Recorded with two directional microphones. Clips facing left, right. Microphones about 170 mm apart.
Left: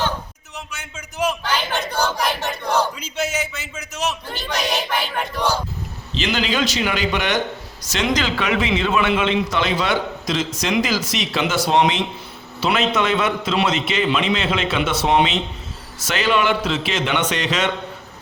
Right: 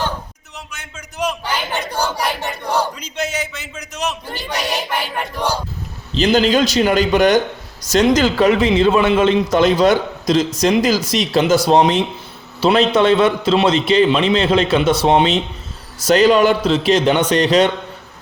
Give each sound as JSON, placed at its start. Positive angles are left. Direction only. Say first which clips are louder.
{"t": 0.7, "sound": "a sound", "louder": "even", "side_deg": 5}
{"t": 1.5, "sound": "a sound", "louder": "right 1 dB", "side_deg": -10}
{"t": 2.0, "sound": "battle cry", "louder": "right 1 dB", "side_deg": -10}
{"t": 2.9, "sound": "a man's voice", "louder": "right 1 dB", "side_deg": 5}
{"t": 4.4, "sound": "speech", "louder": "even", "side_deg": -10}
{"t": 6.1, "sound": "a man's voice", "louder": "right 8 dB", "side_deg": -40}